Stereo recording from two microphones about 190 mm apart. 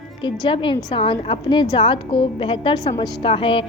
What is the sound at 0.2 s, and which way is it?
A woman's voice, 25° left (ahead or behind).